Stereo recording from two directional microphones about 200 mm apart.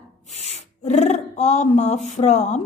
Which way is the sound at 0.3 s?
35° left (ahead or behind).